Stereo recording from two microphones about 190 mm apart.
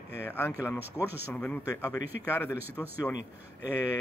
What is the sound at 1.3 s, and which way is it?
Speech, 5° left (ahead or behind).